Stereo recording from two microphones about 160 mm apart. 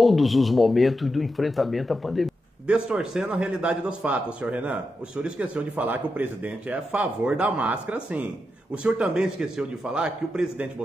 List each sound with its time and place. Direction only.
0.0 s a man's voice: centre (ahead or behind)